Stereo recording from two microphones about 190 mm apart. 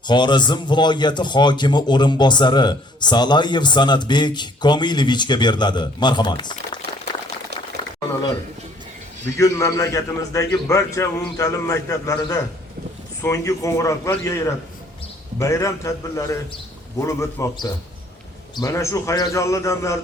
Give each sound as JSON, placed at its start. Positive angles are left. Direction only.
{"t": 0.1, "sound": "a man's voice", "side_deg": 25}
{"t": 9.4, "sound": "a man's voice", "side_deg": 15}